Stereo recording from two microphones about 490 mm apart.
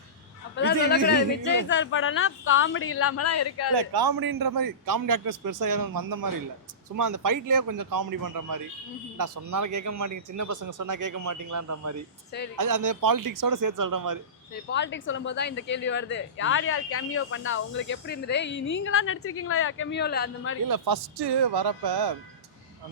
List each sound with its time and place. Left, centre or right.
1.0 s speech: left
3.8 s speech: right
14.5 s speech: left
20.7 s speech: right